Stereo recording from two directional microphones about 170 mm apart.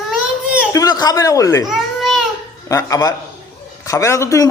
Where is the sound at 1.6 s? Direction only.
Centre (ahead or behind).